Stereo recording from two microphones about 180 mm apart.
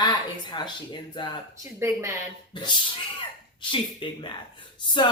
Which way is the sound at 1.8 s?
15° right (ahead or behind).